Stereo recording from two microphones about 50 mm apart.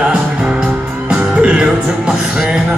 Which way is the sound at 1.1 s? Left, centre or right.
Right.